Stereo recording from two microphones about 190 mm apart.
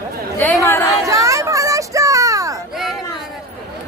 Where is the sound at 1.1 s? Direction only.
15° right (ahead or behind).